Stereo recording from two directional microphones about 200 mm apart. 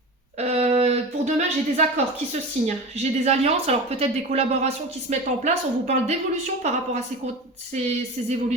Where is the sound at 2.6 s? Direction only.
35° right (ahead or behind).